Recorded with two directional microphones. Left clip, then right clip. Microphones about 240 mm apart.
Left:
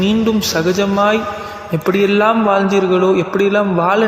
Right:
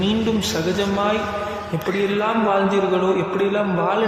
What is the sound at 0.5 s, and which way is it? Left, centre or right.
A man's voice, left.